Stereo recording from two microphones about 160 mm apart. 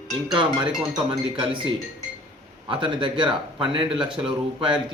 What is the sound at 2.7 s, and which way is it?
Speech, 30° right (ahead or behind).